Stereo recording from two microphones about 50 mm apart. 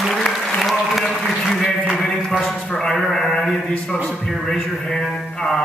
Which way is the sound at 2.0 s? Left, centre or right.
Centre.